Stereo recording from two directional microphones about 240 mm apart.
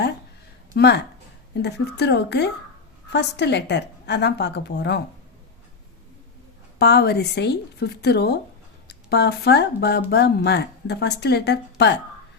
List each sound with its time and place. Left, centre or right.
0.7 s speech: left
6.7 s speech: left